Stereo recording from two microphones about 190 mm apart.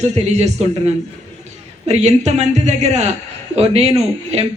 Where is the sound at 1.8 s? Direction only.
35° right (ahead or behind).